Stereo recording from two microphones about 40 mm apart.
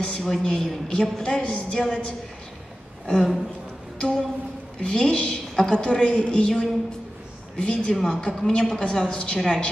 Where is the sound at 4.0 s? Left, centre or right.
Centre.